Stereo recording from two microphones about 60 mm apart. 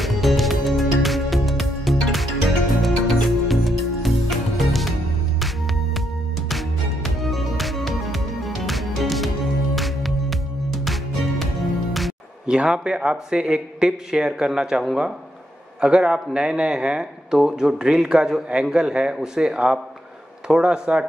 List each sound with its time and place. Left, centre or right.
0.0 s music: centre
7.2 s music: centre
12.4 s speech: centre